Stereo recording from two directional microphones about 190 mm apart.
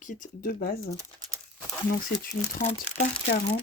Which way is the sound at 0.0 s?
50° left (ahead or behind).